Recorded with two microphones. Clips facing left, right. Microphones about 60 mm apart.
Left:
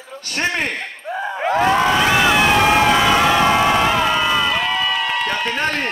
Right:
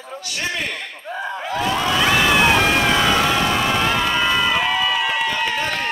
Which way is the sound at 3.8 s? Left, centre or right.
Centre.